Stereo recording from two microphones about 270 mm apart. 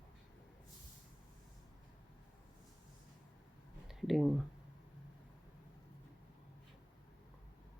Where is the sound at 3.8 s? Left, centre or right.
Centre.